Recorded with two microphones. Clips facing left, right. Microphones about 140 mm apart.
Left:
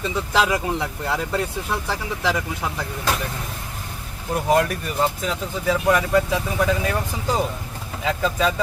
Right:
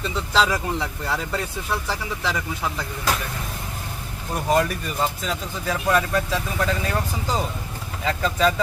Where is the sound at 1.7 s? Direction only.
15° left (ahead or behind).